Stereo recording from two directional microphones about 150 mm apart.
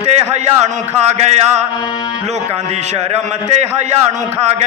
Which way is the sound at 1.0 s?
45° right (ahead or behind).